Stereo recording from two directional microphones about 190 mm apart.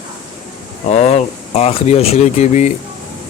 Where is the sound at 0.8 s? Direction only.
35° left (ahead or behind).